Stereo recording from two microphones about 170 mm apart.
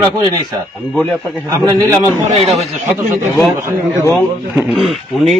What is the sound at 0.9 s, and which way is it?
Speech, 5° left (ahead or behind).